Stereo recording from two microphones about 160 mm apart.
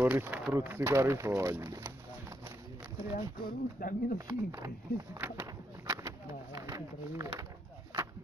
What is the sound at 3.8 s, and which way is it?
Speech, 60° left (ahead or behind).